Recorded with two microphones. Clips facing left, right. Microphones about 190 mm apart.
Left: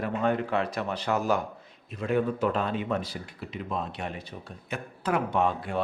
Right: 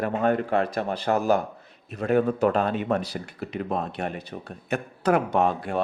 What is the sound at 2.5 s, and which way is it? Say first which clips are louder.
Speech: right 5 dB; 65° right (ahead or behind).